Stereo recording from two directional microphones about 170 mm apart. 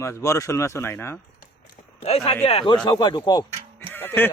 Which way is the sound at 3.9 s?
10° left (ahead or behind).